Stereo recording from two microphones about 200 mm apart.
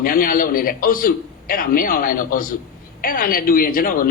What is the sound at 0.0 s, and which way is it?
Speech, 45° left (ahead or behind).